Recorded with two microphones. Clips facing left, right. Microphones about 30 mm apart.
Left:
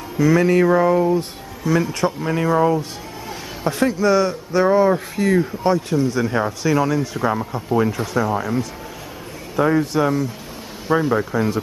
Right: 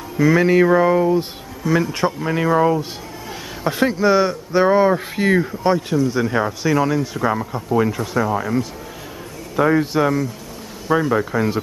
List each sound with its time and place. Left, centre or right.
0.2 s speech: centre